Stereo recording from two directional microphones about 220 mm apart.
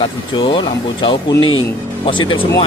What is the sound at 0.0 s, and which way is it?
Speech, 25° left (ahead or behind).